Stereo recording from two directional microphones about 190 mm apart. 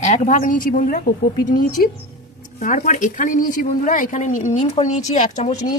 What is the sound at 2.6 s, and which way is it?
Speech, 40° left (ahead or behind).